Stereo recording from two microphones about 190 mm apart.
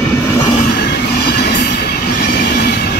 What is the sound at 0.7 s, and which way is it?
Train, 60° left (ahead or behind).